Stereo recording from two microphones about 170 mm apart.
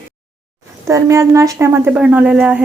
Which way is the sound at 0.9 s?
15° right (ahead or behind).